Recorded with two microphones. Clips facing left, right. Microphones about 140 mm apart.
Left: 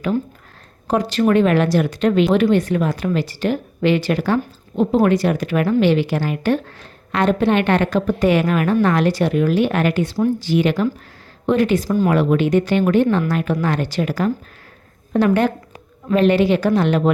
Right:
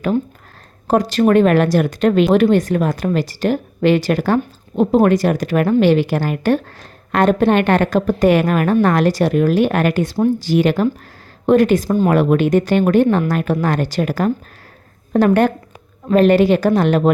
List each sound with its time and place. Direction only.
0.9 s a woman's voice: 40° right (ahead or behind)